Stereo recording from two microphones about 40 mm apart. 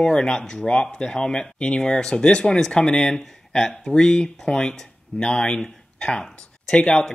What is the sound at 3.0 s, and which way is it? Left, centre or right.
Speech, centre.